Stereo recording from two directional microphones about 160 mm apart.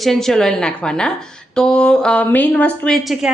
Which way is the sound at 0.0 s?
Centre (ahead or behind).